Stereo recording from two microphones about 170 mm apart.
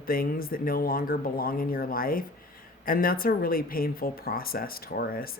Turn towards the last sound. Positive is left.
turn(degrees=60)  # may be behind; listen again after turning